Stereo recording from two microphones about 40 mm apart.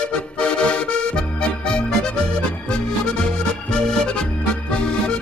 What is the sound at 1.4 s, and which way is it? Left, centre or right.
Music, left.